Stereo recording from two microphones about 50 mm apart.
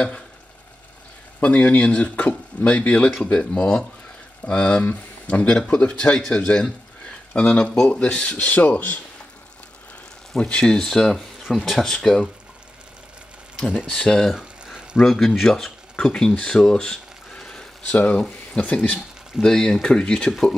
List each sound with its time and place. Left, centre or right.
1.4 s speech: left
6.1 s speech: centre
8.4 s speech: left
10.3 s speech: centre
13.8 s speech: centre
14.3 s a sound: centre
15.0 s speech: centre
17.4 s a sound: centre
17.8 s speech: left
18.6 s speech: centre